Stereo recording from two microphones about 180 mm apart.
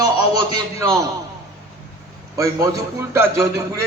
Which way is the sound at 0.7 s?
15° right (ahead or behind).